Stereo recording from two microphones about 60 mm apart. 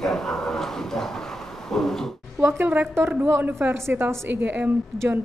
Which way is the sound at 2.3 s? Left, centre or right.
Right.